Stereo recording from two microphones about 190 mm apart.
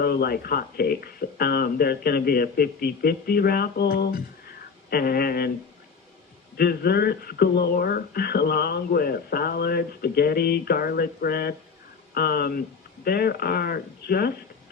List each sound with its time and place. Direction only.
0.0 s speech: 55° left (ahead or behind)
6.6 s speech: 55° left (ahead or behind)